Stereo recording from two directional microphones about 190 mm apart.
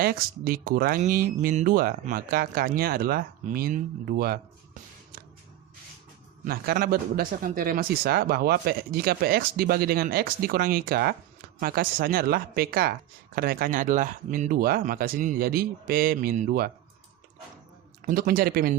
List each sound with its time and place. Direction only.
0.0 s speech: 50° right (ahead or behind)
4.2 s a sound: 50° right (ahead or behind)
6.4 s speech: 50° right (ahead or behind)
18.0 s speech: 50° right (ahead or behind)